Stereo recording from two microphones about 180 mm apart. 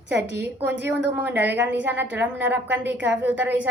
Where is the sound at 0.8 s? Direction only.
10° right (ahead or behind).